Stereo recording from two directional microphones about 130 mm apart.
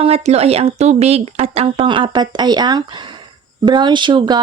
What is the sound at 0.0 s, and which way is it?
Speech, 55° right (ahead or behind).